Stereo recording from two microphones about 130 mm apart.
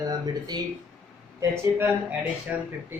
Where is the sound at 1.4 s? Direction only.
15° right (ahead or behind).